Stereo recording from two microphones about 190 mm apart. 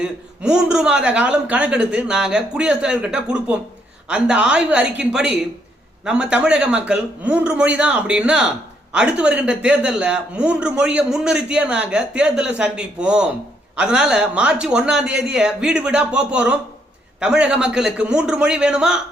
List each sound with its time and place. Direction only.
0.0 s a man's voice: 5° right (ahead or behind)